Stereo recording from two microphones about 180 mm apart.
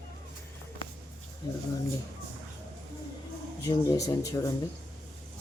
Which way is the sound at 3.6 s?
20° left (ahead or behind).